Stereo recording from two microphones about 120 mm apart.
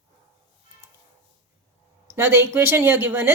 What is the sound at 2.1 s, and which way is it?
Speech, 20° right (ahead or behind).